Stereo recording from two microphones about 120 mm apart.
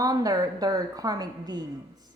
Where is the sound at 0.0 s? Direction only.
30° right (ahead or behind).